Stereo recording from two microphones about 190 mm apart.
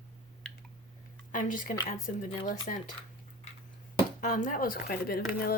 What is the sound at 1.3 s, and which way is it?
Speech, 45° left (ahead or behind).